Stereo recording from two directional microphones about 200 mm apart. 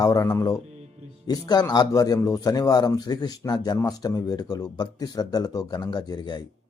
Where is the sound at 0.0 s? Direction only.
15° left (ahead or behind).